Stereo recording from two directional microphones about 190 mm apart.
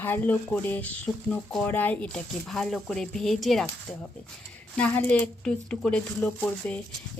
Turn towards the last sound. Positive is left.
turn(degrees=10)  # may be behind; listen again after turning